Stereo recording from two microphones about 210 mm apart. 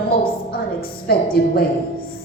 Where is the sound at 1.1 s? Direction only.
45° left (ahead or behind).